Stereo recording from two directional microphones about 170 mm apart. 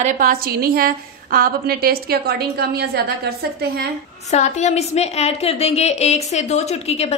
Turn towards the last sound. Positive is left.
turn(degrees=40)  # may be behind; listen again after turning